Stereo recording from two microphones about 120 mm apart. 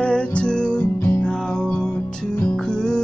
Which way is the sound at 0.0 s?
10° left (ahead or behind).